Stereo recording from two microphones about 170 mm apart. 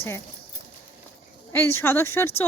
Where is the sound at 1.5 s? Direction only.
15° left (ahead or behind).